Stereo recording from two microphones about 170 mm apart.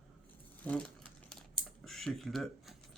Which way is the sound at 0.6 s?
10° left (ahead or behind).